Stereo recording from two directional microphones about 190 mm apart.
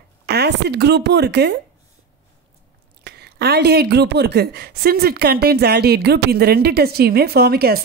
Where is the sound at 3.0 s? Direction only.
60° right (ahead or behind).